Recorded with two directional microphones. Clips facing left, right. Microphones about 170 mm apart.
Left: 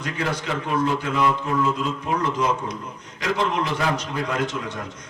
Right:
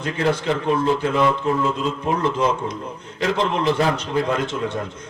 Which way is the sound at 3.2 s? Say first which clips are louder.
Right 2 dB; 30° right (ahead or behind).